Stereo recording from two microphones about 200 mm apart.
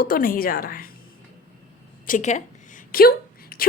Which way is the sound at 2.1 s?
35° left (ahead or behind).